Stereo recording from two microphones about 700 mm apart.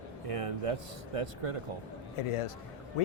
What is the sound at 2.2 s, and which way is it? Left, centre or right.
Speech, left.